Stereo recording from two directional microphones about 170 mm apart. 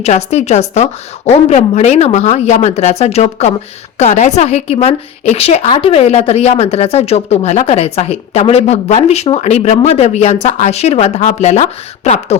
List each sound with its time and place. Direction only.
0.0 s speech: 40° left (ahead or behind)